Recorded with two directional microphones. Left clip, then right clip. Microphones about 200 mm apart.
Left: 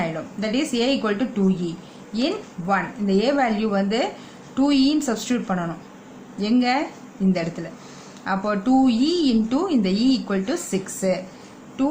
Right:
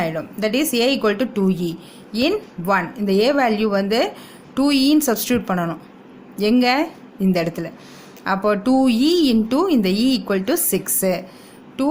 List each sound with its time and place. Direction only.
0.0 s speech: 50° right (ahead or behind)